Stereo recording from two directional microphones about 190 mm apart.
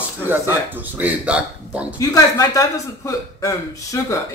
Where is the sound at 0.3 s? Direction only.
10° right (ahead or behind).